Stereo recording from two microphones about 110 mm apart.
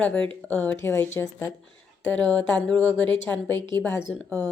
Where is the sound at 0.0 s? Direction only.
15° left (ahead or behind).